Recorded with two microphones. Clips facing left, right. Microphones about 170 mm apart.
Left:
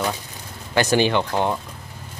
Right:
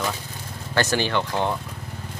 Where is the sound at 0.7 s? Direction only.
15° left (ahead or behind).